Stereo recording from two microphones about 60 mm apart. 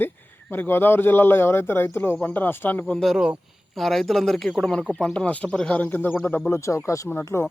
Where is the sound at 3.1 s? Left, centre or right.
Centre.